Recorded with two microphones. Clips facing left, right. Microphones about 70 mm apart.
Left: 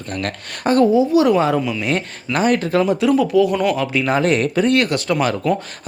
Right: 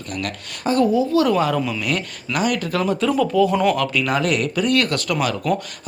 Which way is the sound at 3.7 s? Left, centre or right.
Left.